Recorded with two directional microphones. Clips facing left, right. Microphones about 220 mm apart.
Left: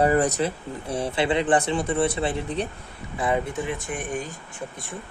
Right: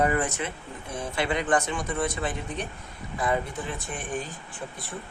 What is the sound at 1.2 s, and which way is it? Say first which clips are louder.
Speech: left 6 dB; 20° left (ahead or behind).